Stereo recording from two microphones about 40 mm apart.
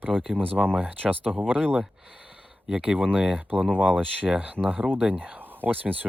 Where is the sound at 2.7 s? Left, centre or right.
Centre.